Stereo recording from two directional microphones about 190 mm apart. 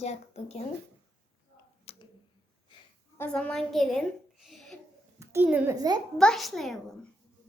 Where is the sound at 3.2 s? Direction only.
5° left (ahead or behind).